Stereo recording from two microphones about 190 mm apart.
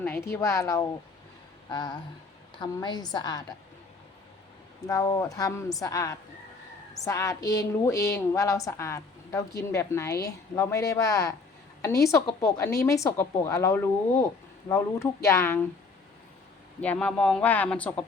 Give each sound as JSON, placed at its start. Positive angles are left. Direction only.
{"t": 0.0, "sound": "a woman's voice", "side_deg": 10}
{"t": 4.9, "sound": "a woman's voice", "side_deg": 20}
{"t": 16.8, "sound": "a woman's voice", "side_deg": 5}